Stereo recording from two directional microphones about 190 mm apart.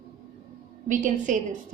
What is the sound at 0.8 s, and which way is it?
Speech, 40° right (ahead or behind).